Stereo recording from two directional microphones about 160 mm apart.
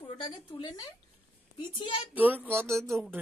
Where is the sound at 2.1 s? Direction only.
10° right (ahead or behind).